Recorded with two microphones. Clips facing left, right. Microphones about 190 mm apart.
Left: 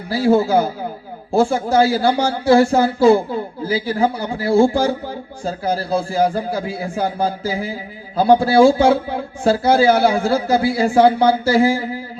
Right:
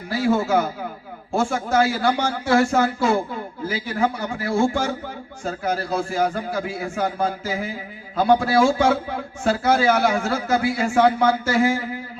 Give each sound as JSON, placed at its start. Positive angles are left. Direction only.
{"t": 0.1, "sound": "a man's voice", "side_deg": 30}